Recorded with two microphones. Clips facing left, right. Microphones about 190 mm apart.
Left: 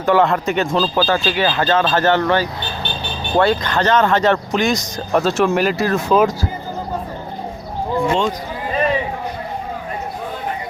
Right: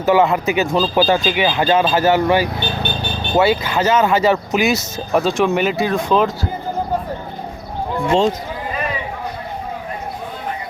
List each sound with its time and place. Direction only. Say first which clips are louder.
0.0 s speech: right 1 dB; 5° right (ahead or behind)
8.1 s speech: right 7 dB; 30° right (ahead or behind)